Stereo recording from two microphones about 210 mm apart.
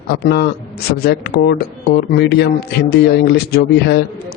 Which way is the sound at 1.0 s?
50° left (ahead or behind).